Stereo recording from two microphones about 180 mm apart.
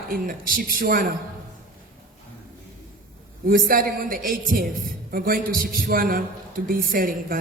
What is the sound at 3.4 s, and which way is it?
A man's voice, 50° right (ahead or behind).